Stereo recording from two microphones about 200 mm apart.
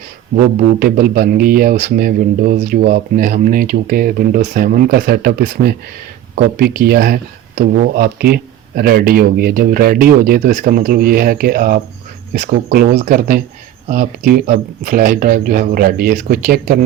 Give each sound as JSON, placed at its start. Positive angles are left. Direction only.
{"t": 0.3, "sound": "speech", "side_deg": -50}